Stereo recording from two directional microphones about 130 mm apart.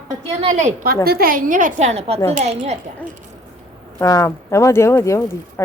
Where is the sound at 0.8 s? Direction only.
90° right; by 2.6 s 60° right (ahead or behind).